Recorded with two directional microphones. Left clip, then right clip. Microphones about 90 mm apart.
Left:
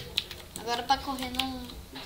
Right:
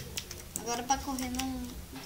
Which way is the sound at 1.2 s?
10° right (ahead or behind).